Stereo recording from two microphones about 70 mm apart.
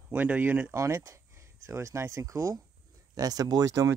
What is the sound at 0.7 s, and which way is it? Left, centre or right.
Speech, right.